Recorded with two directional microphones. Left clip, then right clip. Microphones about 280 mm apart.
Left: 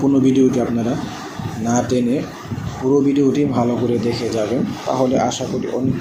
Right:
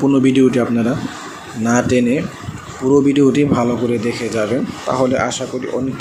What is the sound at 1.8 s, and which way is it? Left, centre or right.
Speech, right.